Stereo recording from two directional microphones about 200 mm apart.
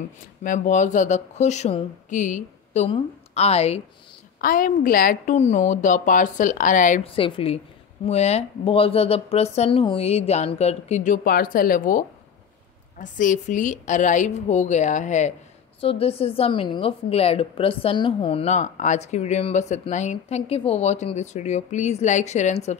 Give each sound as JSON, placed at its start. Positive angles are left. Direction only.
{"t": 0.4, "sound": "a woman's voice", "side_deg": 40}
{"t": 4.4, "sound": "a woman's voice", "side_deg": 45}
{"t": 7.1, "sound": "a woman's voice", "side_deg": 25}
{"t": 11.2, "sound": "speech", "side_deg": 45}
{"t": 13.0, "sound": "a woman's voice", "side_deg": 40}